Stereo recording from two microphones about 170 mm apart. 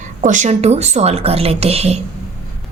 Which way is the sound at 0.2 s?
45° right (ahead or behind).